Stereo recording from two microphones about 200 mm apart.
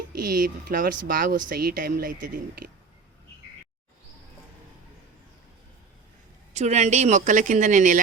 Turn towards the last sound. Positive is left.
turn(degrees=-40)  # may be behind; listen again after turning